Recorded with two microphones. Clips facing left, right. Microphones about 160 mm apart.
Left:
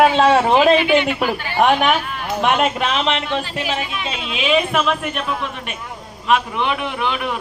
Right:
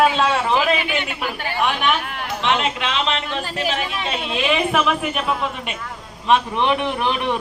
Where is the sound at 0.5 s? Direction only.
30° left (ahead or behind).